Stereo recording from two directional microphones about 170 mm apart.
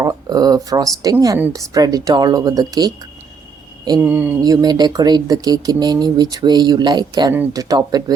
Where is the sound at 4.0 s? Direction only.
10° right (ahead or behind).